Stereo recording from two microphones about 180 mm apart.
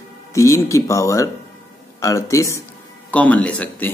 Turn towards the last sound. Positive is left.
turn(degrees=10)  # may be behind; listen again after turning